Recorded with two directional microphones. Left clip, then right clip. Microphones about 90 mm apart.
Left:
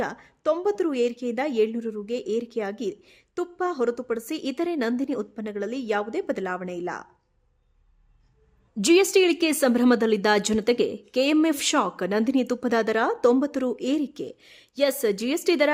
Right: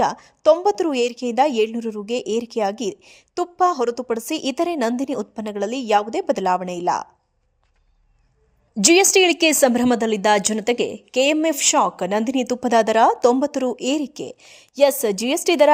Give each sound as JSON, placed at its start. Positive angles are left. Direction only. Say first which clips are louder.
{"t": 0.0, "sound": "a woman's voice", "louder": "right 10 dB", "side_deg": -30}
{"t": 8.7, "sound": "a woman's voice", "louder": "right 4 dB", "side_deg": -25}
{"t": 9.9, "sound": "a woman's voice", "louder": "right 3 dB", "side_deg": -5}